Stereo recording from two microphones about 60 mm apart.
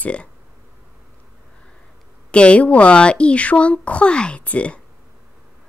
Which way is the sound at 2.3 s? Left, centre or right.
Centre.